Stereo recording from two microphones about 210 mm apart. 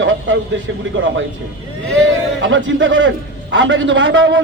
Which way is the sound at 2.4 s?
60° right (ahead or behind).